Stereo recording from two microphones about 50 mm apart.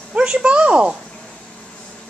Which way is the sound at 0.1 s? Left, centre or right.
Centre.